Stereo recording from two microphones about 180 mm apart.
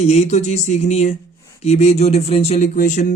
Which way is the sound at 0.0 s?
35° left (ahead or behind).